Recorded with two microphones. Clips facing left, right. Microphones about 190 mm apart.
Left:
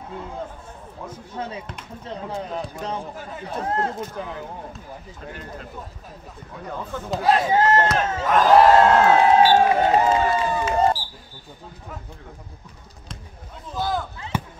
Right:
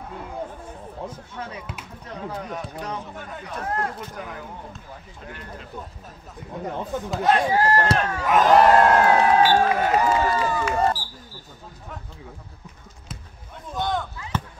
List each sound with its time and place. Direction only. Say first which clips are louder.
1.3 s speech: left 3 dB; 25° left (ahead or behind)
6.5 s speech: right 3 dB; 20° right (ahead or behind)
7.1 s speech: left 1 dB; centre (ahead or behind)
7.4 s speech: left 2 dB; 25° left (ahead or behind)
8.3 s speech: left 1 dB; centre (ahead or behind)
8.7 s speech: left 2 dB; 25° left (ahead or behind)
13.7 s speech: even; 5° left (ahead or behind)
14.3 s run: left 1 dB; 10° left (ahead or behind)